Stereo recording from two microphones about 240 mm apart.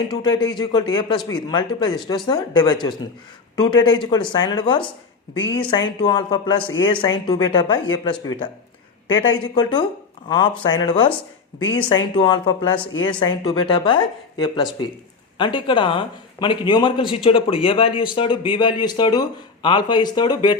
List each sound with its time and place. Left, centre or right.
0.1 s a man's voice: centre
5.3 s a woman's voice: left
5.5 s a man's voice: left